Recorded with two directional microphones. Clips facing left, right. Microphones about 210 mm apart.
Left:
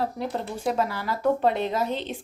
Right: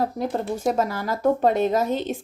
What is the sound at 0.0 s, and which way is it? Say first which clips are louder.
A woman's voice: right 4 dB; 45° right (ahead or behind).